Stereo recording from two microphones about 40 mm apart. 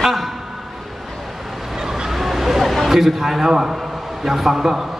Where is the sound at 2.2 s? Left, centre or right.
Centre.